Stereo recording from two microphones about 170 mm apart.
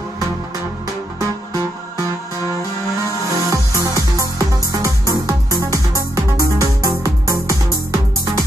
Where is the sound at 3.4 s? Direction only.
20° right (ahead or behind).